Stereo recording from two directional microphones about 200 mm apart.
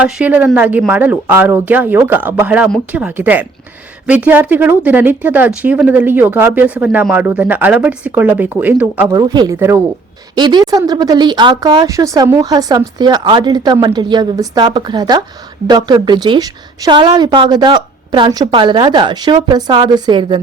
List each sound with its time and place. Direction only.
0.0 s speech: 10° right (ahead or behind); by 20.4 s 25° right (ahead or behind)